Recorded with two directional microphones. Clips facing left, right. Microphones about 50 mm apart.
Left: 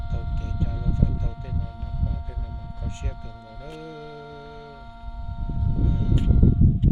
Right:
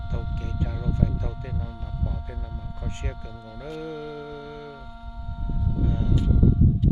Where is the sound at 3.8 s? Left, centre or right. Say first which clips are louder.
Right 5 dB; right.